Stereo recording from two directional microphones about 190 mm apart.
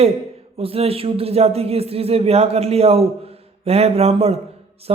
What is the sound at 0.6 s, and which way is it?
Speech, 30° right (ahead or behind).